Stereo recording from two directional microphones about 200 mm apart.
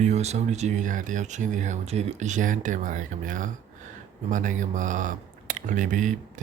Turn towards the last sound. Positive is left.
turn(degrees=-40)  # may be behind; listen again after turning